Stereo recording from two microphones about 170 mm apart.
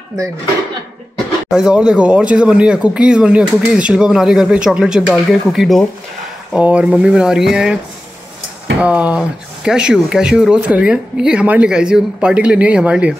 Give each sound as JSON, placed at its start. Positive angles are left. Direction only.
{"t": 1.5, "sound": "speech", "side_deg": -5}
{"t": 8.8, "sound": "speech", "side_deg": -10}